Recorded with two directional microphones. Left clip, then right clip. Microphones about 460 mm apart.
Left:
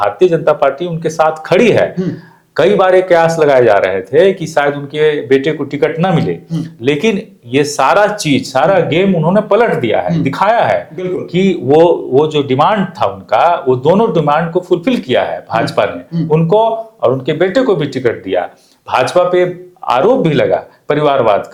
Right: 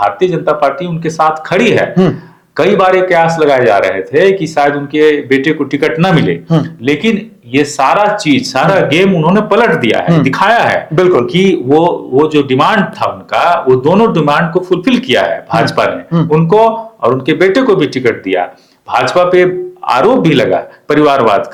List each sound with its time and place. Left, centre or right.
0.0 s a man's voice: left
6.8 s a man's voice: left